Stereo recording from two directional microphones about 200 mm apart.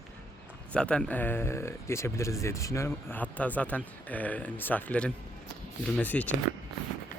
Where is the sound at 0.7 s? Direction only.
5° left (ahead or behind).